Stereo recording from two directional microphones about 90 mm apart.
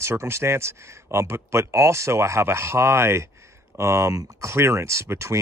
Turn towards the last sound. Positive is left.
turn(degrees=-30)  # may be behind; listen again after turning